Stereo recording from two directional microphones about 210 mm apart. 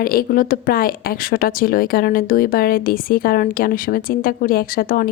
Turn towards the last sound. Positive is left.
turn(degrees=40)  # may be behind; listen again after turning